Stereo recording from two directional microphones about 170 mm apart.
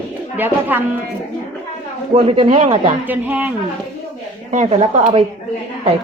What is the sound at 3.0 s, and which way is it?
Speech, 10° right (ahead or behind).